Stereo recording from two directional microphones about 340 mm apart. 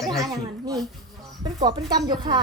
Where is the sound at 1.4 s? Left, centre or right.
Centre.